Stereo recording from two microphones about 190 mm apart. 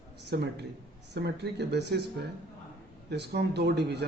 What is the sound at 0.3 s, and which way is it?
Speech, 60° right (ahead or behind).